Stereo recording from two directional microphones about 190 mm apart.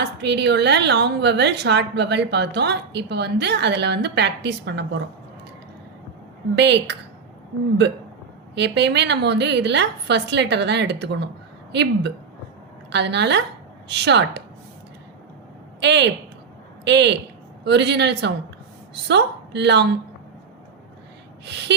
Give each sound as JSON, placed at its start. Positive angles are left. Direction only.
{"t": 0.0, "sound": "a woman's voice", "side_deg": -65}
{"t": 6.6, "sound": "a woman's voice", "side_deg": -65}
{"t": 8.5, "sound": "a woman's voice", "side_deg": -65}
{"t": 15.8, "sound": "a woman's voice", "side_deg": -65}
{"t": 21.4, "sound": "a woman's voice", "side_deg": -65}